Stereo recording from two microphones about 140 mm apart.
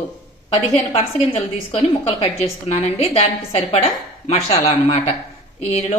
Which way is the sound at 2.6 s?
45° left (ahead or behind).